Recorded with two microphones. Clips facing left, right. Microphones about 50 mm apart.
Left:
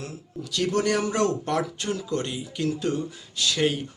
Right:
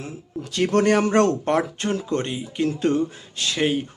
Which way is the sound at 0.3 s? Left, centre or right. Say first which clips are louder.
Right 5 dB; right.